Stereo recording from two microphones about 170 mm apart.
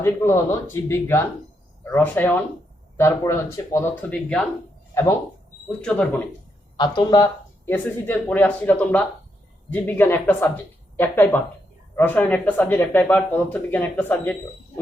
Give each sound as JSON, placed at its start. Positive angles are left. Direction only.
{"t": 0.0, "sound": "speech", "side_deg": 15}
{"t": 5.6, "sound": "speech", "side_deg": 10}
{"t": 6.7, "sound": "speech", "side_deg": 25}